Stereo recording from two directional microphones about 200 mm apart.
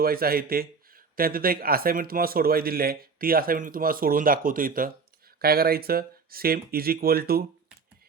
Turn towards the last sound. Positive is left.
turn(degrees=-50)  # may be behind; listen again after turning